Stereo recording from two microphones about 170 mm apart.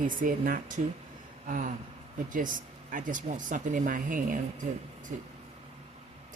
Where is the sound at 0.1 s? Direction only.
50° right (ahead or behind).